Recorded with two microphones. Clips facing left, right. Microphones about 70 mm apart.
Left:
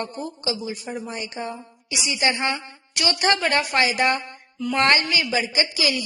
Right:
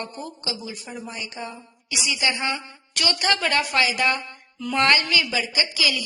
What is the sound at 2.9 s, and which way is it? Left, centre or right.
A woman's voice, left.